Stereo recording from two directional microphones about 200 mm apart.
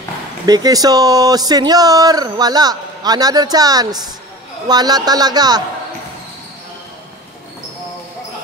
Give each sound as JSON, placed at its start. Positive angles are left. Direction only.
{"t": 0.5, "sound": "speech", "side_deg": -20}